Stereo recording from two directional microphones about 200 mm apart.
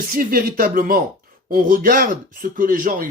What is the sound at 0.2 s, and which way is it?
Speech, 45° right (ahead or behind).